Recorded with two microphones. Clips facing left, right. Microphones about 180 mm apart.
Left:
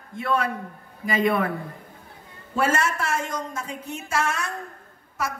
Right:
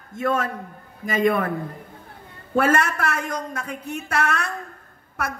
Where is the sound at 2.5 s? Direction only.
55° right (ahead or behind).